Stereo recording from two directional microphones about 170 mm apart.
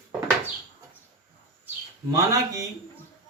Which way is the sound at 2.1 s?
20° right (ahead or behind).